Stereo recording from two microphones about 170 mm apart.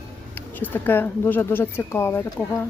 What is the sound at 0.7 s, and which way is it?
Speech, 10° left (ahead or behind).